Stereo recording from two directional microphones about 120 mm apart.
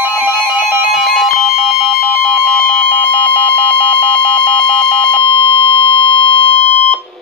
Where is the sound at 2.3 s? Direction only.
5° left (ahead or behind).